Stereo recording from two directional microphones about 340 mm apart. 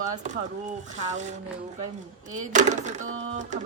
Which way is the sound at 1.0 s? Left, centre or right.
Right.